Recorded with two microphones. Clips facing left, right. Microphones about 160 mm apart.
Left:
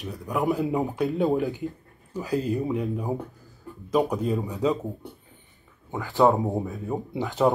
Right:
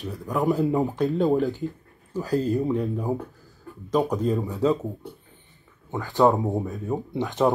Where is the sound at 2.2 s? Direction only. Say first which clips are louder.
Right 2 dB; 40° right (ahead or behind).